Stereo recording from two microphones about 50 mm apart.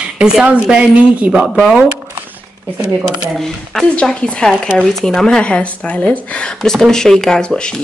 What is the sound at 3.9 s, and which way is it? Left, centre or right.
Speech, centre.